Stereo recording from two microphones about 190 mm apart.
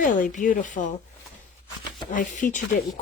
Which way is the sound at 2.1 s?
40° left (ahead or behind).